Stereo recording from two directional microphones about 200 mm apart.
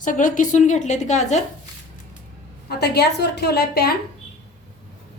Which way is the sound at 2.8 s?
55° left (ahead or behind).